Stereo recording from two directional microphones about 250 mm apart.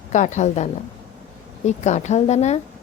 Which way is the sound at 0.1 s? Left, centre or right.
Left.